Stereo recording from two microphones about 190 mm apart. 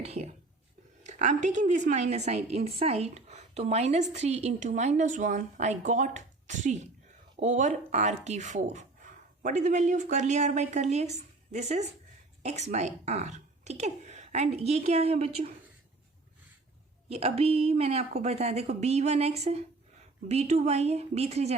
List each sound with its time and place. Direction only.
0.0 s a woman's voice: 35° right (ahead or behind)
17.1 s a woman's voice: 30° right (ahead or behind)